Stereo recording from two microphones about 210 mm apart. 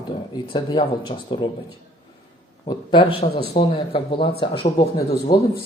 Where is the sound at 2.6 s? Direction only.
20° left (ahead or behind).